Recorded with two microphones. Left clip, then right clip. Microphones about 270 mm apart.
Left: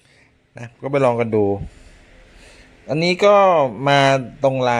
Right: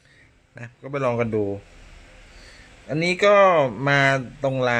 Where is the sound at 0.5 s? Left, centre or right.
Centre.